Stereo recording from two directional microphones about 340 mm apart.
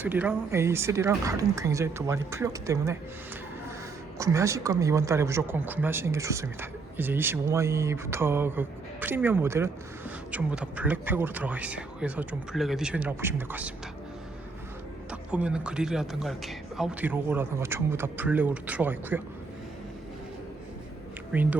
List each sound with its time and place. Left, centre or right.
0.0 s speech: centre
4.2 s a man's voice: centre
15.1 s a man's voice: centre